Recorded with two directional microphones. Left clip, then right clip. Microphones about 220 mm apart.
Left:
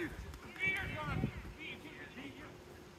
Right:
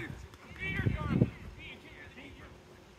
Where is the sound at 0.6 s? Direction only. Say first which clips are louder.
Left 1 dB; 20° right (ahead or behind).